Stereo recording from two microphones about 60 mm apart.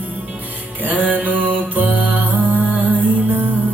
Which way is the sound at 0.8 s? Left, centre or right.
Right.